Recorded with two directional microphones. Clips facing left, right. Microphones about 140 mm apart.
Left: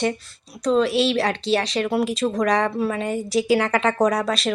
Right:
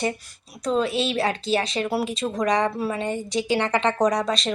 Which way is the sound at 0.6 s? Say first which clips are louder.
Left 4 dB; 5° right (ahead or behind).